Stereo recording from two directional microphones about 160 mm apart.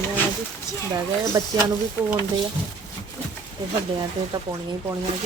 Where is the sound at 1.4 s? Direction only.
20° right (ahead or behind).